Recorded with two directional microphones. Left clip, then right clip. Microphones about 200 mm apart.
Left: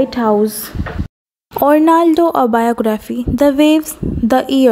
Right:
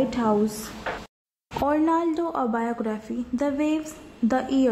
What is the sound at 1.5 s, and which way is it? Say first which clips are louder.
Speech: left 12 dB; 40° left (ahead or behind).